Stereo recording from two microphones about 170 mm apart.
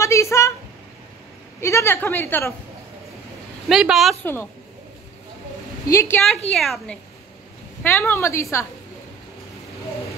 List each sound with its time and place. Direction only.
0.0 s a sound: 15° left (ahead or behind)
1.6 s a woman's voice: 15° left (ahead or behind)
3.6 s speech: centre (ahead or behind)
4.2 s a woman's voice: 15° left (ahead or behind)
5.9 s a woman's voice: 15° left (ahead or behind)
6.5 s speech: centre (ahead or behind)
7.8 s a woman's voice: 15° left (ahead or behind)